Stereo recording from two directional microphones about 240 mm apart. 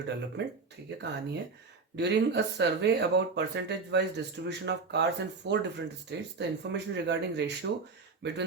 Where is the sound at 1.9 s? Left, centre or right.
Right.